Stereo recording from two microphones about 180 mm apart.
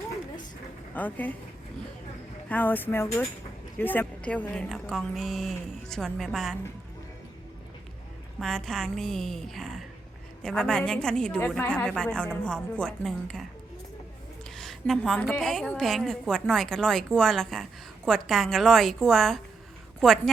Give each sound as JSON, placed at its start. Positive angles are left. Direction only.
{"t": 0.9, "sound": "speech", "side_deg": 10}
{"t": 2.5, "sound": "a woman's voice", "side_deg": 10}
{"t": 8.4, "sound": "a woman's voice", "side_deg": 0}
{"t": 14.5, "sound": "a woman's voice", "side_deg": 0}